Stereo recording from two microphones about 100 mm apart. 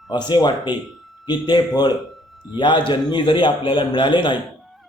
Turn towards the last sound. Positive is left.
turn(degrees=55)  # may be behind; listen again after turning